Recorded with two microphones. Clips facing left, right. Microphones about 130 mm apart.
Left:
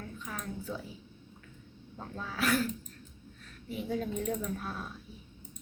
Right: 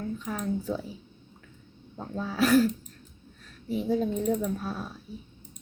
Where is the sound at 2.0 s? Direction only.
30° right (ahead or behind).